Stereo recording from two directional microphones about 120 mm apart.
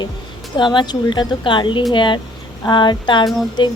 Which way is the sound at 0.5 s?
40° left (ahead or behind).